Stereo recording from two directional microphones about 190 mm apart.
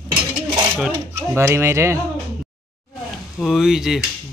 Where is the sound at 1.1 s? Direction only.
15° right (ahead or behind).